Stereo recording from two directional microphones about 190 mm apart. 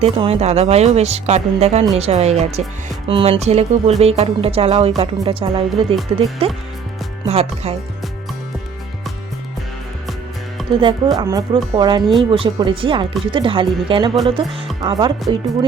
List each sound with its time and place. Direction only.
0.0 s speech: 30° right (ahead or behind)
10.8 s speech: 25° right (ahead or behind)